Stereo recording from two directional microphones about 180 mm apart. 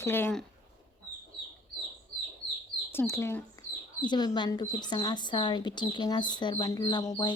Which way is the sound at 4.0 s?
25° left (ahead or behind).